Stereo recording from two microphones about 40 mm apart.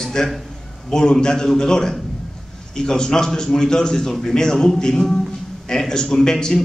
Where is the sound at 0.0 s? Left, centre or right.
Centre.